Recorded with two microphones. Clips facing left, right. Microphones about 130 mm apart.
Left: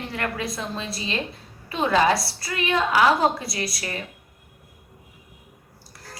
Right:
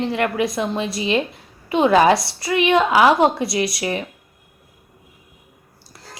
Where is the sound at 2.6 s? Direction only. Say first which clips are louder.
Right 5 dB; 85° right.